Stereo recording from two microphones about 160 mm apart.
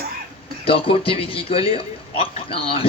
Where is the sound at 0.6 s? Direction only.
35° left (ahead or behind).